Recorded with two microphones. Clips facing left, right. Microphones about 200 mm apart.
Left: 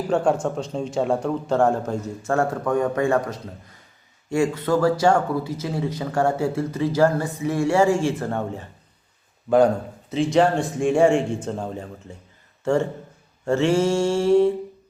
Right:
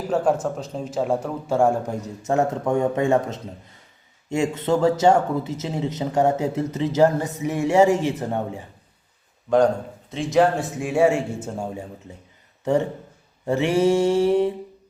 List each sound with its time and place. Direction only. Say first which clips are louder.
0.1 s a man's voice: even; 5° right (ahead or behind)
10.1 s a man's voice: even; centre (ahead or behind); by 14.5 s 15° right (ahead or behind)